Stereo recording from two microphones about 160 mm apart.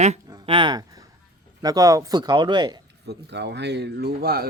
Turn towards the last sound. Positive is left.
turn(degrees=-75)  # may be behind; listen again after turning